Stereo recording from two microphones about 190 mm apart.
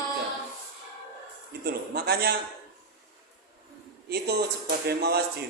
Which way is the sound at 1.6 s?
55° right (ahead or behind).